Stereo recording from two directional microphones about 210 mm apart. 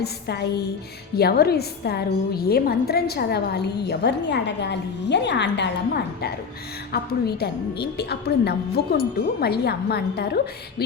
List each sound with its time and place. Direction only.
0.0 s a woman's voice: 50° left (ahead or behind)